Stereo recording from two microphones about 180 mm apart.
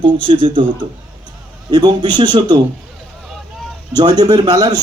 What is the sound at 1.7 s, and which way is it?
Speech, 25° right (ahead or behind).